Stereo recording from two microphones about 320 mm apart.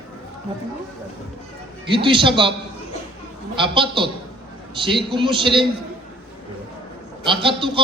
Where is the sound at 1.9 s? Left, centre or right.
Centre.